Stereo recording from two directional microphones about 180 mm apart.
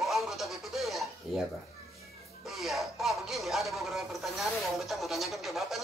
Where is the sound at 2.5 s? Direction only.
Centre (ahead or behind).